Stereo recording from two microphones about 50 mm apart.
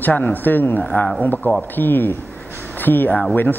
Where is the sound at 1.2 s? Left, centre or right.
Left.